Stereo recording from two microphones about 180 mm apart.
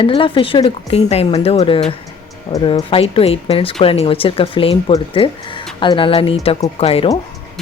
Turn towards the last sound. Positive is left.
turn(degrees=30)  # may be behind; listen again after turning